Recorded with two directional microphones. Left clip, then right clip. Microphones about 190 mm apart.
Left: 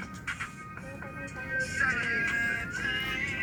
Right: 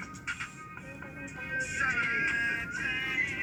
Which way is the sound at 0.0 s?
35° left (ahead or behind).